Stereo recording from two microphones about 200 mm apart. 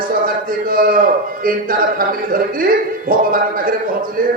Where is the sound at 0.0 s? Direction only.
45° right (ahead or behind).